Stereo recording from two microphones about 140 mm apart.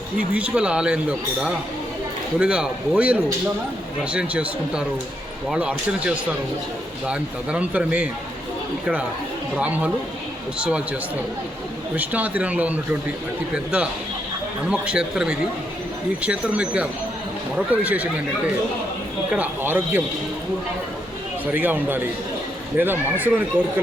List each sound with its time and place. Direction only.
0.2 s speech: 10° right (ahead or behind)
9.6 s speech: 10° right (ahead or behind)
11.9 s a man's voice: 10° right (ahead or behind)
21.4 s speech: 10° right (ahead or behind)